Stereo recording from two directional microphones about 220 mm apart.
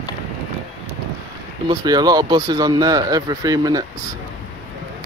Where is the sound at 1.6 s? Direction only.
15° right (ahead or behind).